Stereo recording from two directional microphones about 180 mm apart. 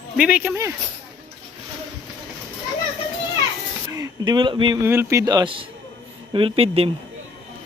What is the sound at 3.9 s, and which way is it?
Speech, 20° right (ahead or behind).